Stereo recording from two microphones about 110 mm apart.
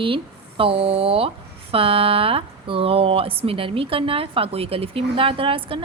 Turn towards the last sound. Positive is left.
turn(degrees=-55)  # may be behind; listen again after turning